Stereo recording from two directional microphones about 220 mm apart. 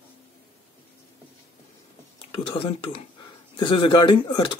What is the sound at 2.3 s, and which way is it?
Speech, 25° left (ahead or behind).